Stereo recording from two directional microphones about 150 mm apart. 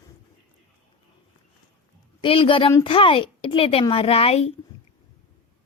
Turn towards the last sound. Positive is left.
turn(degrees=40)  # may be behind; listen again after turning